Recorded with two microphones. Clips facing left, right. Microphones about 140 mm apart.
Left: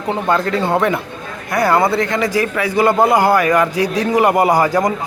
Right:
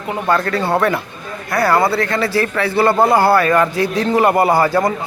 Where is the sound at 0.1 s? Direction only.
20° left (ahead or behind).